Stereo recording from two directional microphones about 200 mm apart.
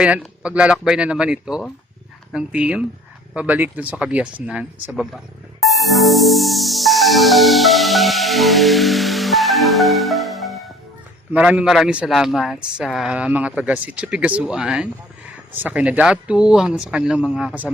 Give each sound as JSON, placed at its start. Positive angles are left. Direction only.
{"t": 0.0, "sound": "speech", "side_deg": -5}
{"t": 5.6, "sound": "music", "side_deg": 0}
{"t": 11.3, "sound": "speech", "side_deg": -5}